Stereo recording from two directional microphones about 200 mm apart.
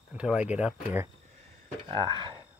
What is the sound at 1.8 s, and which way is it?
Speech, 25° right (ahead or behind).